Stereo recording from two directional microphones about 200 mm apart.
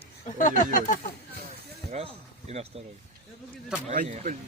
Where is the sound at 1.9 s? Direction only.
30° right (ahead or behind).